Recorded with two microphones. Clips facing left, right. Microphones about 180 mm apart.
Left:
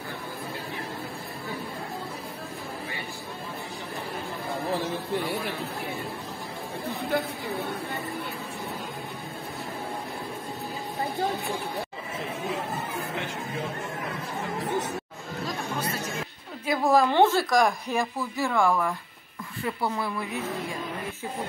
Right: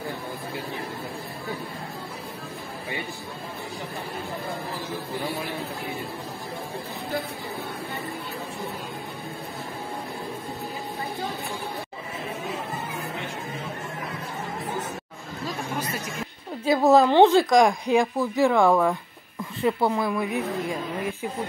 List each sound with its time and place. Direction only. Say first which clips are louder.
16.6 s a woman's voice: right 5 dB; 25° right (ahead or behind)